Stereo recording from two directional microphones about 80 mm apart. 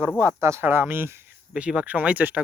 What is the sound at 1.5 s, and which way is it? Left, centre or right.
Speech, centre.